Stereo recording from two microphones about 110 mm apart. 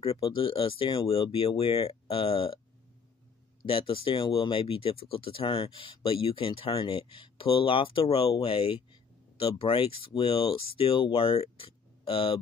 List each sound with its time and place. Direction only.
0.0 s speech: 55° left (ahead or behind)
3.6 s speech: 55° left (ahead or behind)